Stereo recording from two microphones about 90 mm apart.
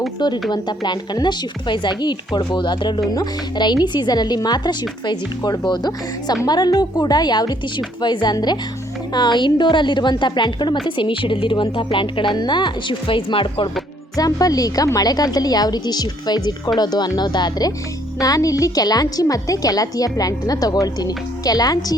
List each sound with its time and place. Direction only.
0.5 s a woman's voice: 55° left (ahead or behind)
3.2 s a woman's voice: 50° left (ahead or behind); by 13.7 s 70° left (ahead or behind)
14.2 s a woman's voice: 45° left (ahead or behind)